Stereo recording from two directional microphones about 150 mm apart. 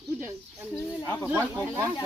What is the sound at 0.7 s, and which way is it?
Speech, 10° left (ahead or behind).